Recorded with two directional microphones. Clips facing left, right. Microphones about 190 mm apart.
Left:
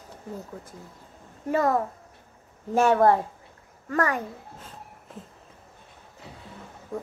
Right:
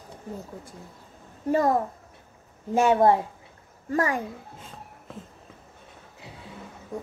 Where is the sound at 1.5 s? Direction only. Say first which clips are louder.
Right 1 dB; 35° right (ahead or behind).